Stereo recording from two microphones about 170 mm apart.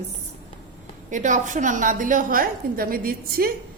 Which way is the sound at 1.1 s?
50° right (ahead or behind).